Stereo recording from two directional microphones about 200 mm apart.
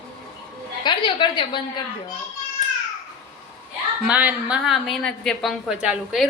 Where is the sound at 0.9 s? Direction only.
25° left (ahead or behind).